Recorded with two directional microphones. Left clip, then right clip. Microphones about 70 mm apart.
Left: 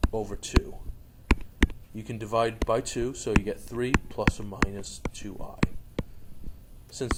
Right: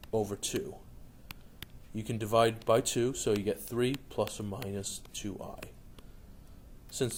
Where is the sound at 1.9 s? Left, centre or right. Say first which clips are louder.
Left 1 dB; centre.